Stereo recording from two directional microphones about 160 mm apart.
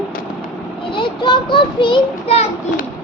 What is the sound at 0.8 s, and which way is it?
A child's voice, 30° left (ahead or behind).